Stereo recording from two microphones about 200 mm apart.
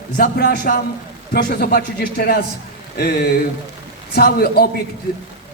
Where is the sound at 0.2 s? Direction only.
50° left (ahead or behind).